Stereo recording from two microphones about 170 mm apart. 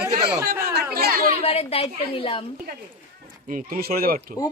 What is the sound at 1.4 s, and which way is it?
A woman's voice, 35° left (ahead or behind).